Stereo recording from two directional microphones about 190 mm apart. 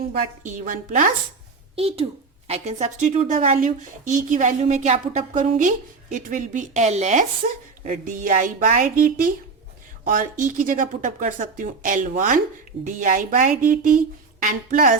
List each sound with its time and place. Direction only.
0.4 s speech: 45° right (ahead or behind)
1.7 s speech: 30° right (ahead or behind)